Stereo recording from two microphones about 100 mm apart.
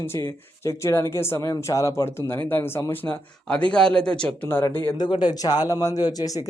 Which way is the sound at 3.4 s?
10° left (ahead or behind).